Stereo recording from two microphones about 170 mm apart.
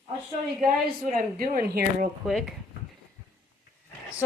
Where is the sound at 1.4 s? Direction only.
60° right (ahead or behind).